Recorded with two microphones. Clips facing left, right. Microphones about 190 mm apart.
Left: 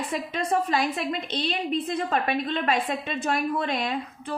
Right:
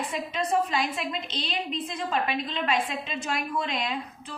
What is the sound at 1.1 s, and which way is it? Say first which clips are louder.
A woman's voice: left 4 dB; 55° left (ahead or behind).